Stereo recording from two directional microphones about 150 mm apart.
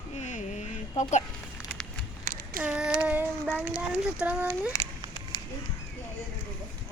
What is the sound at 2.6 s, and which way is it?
Speech, 10° right (ahead or behind).